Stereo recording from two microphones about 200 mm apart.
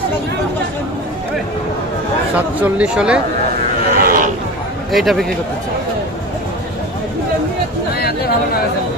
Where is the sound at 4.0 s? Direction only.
45° right (ahead or behind).